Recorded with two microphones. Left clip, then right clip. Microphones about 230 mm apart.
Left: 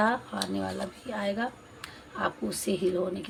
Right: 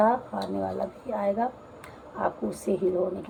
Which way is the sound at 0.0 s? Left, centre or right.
Left.